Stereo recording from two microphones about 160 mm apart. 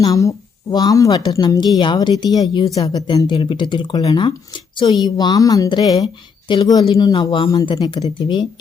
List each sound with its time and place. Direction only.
0.0 s speech: 20° left (ahead or behind)